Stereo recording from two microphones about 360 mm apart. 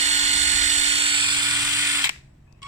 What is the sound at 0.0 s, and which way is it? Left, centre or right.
Helicopter, centre.